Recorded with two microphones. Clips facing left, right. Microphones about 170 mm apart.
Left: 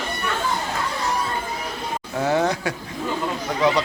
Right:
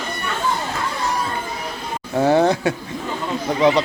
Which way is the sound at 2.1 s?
30° right (ahead or behind).